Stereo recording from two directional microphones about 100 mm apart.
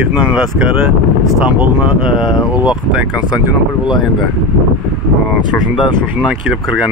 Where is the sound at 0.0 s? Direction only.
15° right (ahead or behind).